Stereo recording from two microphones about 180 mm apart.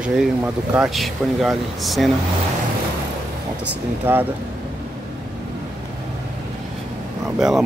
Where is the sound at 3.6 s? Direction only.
10° right (ahead or behind).